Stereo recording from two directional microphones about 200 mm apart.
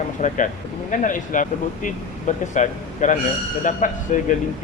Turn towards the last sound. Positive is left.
turn(degrees=40)  # may be behind; listen again after turning